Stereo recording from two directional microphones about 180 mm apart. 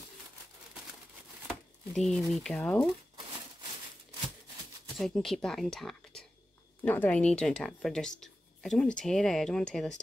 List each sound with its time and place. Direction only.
1.5 s speech: centre (ahead or behind)
4.9 s speech: centre (ahead or behind)